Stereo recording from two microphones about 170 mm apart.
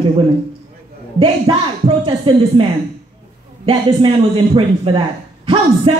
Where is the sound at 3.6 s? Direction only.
30° right (ahead or behind).